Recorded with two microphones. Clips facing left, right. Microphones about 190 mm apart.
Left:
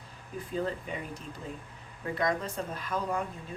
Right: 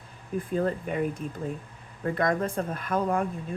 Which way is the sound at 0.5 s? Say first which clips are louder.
Right 5 dB; 55° right (ahead or behind).